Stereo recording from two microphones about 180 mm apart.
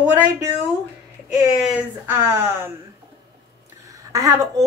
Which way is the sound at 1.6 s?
10° right (ahead or behind).